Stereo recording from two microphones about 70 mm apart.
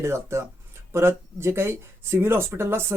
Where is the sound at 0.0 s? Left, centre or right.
Right.